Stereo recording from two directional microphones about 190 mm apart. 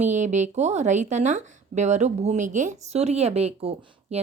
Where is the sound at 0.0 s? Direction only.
40° right (ahead or behind).